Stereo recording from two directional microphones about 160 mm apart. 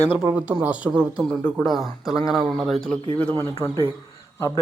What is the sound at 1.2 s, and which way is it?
A man's voice, centre (ahead or behind).